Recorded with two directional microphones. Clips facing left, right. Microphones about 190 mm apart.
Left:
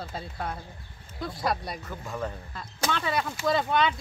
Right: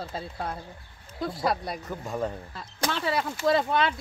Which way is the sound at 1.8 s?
15° right (ahead or behind).